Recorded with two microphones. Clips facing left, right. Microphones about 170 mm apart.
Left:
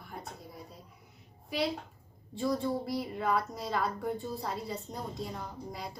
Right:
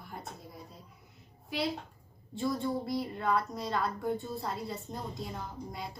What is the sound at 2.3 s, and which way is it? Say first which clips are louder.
A woman's voice: left 1 dB; centre (ahead or behind).